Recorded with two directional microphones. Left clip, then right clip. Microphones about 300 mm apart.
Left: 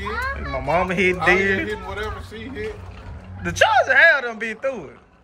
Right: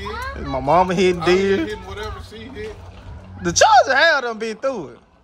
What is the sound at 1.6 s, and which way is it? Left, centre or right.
Speech, centre.